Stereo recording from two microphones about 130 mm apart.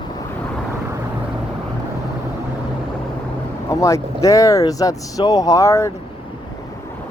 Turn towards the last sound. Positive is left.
turn(degrees=25)  # may be behind; listen again after turning